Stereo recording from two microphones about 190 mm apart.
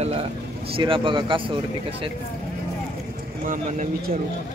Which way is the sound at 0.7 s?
25° right (ahead or behind).